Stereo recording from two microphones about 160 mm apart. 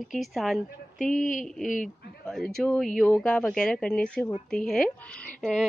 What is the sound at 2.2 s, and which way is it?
Speech, centre (ahead or behind).